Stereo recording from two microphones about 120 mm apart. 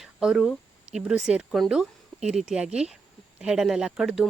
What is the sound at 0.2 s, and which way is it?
Speech, 5° right (ahead or behind).